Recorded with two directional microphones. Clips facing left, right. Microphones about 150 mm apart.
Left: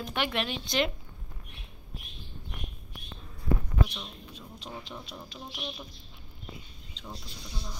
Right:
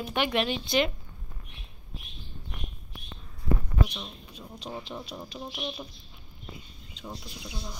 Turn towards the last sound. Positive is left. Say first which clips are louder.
# right 3 dB
turn(degrees=-10)  # may be behind; listen again after turning